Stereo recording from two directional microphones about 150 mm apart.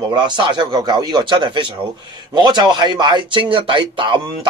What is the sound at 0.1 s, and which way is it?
A man's voice, 30° right (ahead or behind).